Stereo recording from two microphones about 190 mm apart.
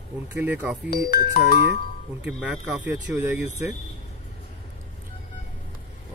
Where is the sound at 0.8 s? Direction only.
55° left (ahead or behind).